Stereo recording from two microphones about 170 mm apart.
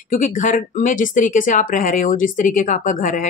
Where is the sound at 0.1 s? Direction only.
50° left (ahead or behind).